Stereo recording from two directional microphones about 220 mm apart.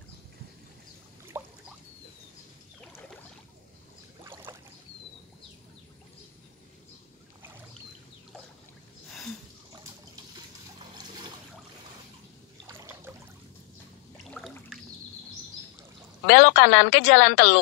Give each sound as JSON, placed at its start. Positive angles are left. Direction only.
{"t": 1.3, "sound": "boat", "side_deg": -10}
{"t": 4.5, "sound": "boat", "side_deg": -15}
{"t": 11.0, "sound": "trickle", "side_deg": -20}
{"t": 12.6, "sound": "trickle", "side_deg": -10}
{"t": 14.1, "sound": "water", "side_deg": 0}
{"t": 16.3, "sound": "a woman's voice", "side_deg": 50}